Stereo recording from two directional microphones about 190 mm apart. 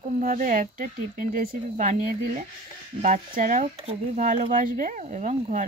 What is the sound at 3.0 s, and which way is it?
Speech, 40° right (ahead or behind).